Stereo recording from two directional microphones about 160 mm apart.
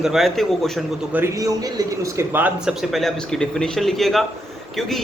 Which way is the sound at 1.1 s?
15° right (ahead or behind).